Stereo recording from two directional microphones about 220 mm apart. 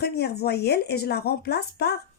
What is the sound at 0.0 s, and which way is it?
Speech, 45° left (ahead or behind).